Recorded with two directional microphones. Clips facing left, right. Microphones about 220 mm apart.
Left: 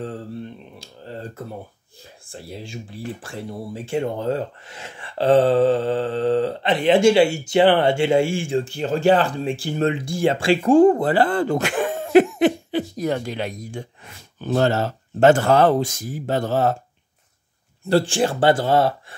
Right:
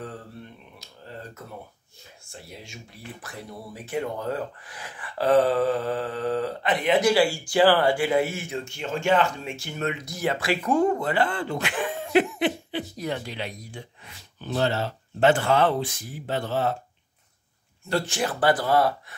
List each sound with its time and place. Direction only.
0.7 s speech: 30° left (ahead or behind)
17.8 s speech: 30° left (ahead or behind)